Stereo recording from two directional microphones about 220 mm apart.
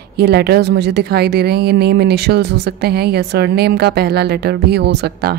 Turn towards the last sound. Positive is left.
turn(degrees=-45)  # may be behind; listen again after turning